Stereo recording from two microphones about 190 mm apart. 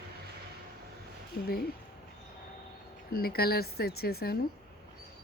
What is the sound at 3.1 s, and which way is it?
A woman's voice, 55° left (ahead or behind).